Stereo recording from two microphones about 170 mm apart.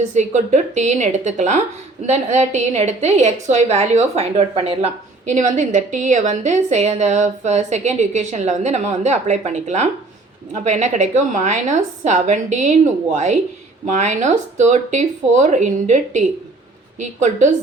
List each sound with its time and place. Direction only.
0.1 s a woman's voice: 45° right (ahead or behind)
5.3 s a woman's voice: 45° right (ahead or behind)